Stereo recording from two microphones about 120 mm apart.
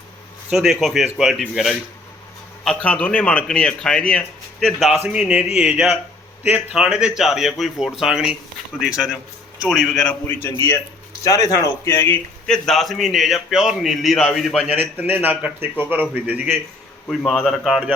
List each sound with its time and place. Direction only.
0.5 s a man's voice: 5° right (ahead or behind)
2.6 s a man's voice: 10° left (ahead or behind)
10.2 s a man's voice: 20° left (ahead or behind)
12.5 s a man's voice: 5° left (ahead or behind); by 16.6 s 15° right (ahead or behind)
17.1 s a man's voice: 5° left (ahead or behind)